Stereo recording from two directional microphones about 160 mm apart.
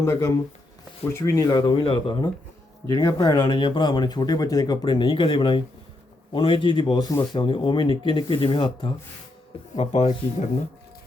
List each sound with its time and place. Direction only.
0.0 s speech: 20° left (ahead or behind)
2.8 s speech: 20° left (ahead or behind); by 10.1 s 40° left (ahead or behind)